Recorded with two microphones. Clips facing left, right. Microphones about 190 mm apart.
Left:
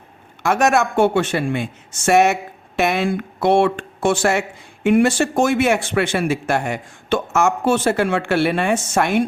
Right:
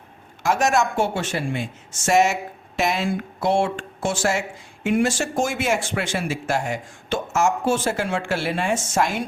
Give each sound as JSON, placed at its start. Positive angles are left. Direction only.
{"t": 0.4, "sound": "speech", "side_deg": 60}